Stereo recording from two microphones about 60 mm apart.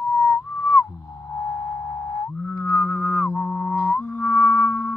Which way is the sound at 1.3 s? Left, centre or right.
Left.